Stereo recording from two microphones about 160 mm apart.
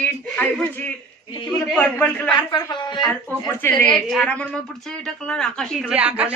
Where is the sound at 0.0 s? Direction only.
10° left (ahead or behind).